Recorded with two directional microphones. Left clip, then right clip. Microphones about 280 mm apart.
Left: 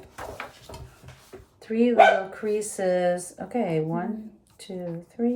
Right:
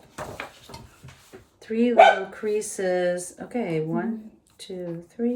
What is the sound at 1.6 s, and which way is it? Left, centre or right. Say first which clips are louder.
Speech: right 2 dB; centre.